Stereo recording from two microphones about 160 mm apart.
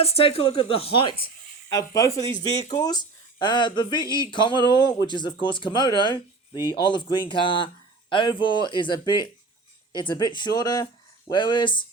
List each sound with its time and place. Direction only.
0.0 s speech: 35° left (ahead or behind)
1.7 s speech: 20° left (ahead or behind)